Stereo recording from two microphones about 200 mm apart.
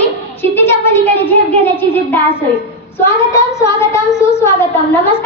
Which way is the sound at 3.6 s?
15° left (ahead or behind).